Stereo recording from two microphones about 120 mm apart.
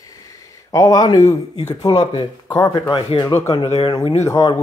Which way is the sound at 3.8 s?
45° left (ahead or behind).